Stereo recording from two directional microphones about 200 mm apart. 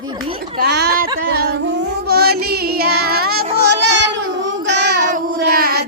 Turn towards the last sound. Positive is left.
turn(degrees=-50)  # may be behind; listen again after turning